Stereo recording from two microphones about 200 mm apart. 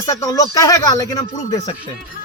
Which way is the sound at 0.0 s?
15° left (ahead or behind).